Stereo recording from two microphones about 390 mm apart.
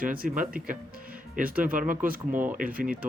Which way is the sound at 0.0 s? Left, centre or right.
Right.